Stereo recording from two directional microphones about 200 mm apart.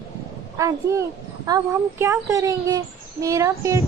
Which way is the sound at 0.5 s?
15° right (ahead or behind).